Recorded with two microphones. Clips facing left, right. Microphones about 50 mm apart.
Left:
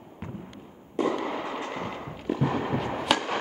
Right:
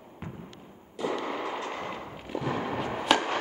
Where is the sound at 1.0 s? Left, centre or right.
Left.